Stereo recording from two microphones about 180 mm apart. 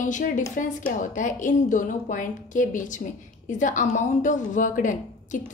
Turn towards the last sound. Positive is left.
turn(degrees=45)  # may be behind; listen again after turning